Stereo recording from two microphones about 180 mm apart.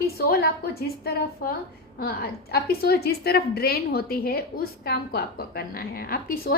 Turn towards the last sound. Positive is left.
turn(degrees=55)  # may be behind; listen again after turning